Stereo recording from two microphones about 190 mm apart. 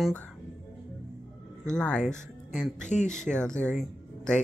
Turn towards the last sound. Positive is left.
turn(degrees=5)  # may be behind; listen again after turning